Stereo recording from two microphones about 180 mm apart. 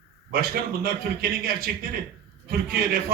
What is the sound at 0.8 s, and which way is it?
A man's voice, 55° right (ahead or behind).